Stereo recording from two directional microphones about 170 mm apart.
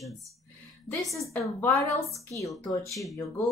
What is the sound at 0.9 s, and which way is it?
Speech, centre (ahead or behind).